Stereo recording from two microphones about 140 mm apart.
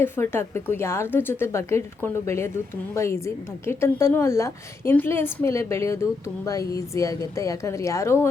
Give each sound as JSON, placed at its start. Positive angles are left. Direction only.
{"t": 0.0, "sound": "a woman's voice", "side_deg": 15}